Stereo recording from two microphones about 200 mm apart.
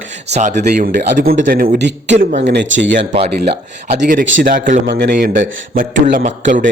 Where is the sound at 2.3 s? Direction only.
35° right (ahead or behind).